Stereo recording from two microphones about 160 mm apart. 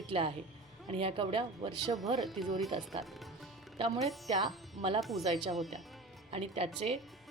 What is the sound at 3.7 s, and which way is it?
Speech, 35° right (ahead or behind).